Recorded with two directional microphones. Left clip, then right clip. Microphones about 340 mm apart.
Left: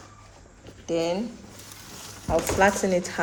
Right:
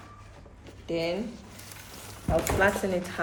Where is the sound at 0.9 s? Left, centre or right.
Left.